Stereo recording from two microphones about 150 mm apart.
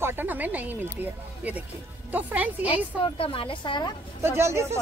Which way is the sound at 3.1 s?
35° left (ahead or behind).